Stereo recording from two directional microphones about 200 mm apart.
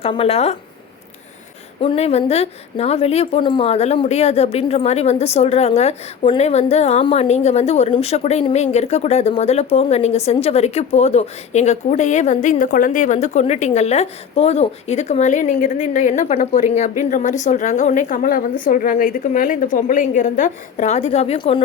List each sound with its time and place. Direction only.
0.0 s a woman's voice: 30° left (ahead or behind)
1.8 s a woman's voice: 30° left (ahead or behind)